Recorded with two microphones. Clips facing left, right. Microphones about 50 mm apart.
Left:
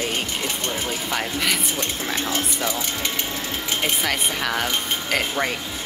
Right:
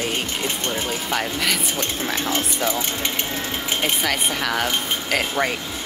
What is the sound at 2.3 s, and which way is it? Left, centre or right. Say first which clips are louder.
Speech: right 2 dB; right.